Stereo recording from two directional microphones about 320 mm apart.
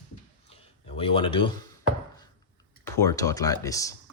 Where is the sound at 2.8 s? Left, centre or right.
Centre.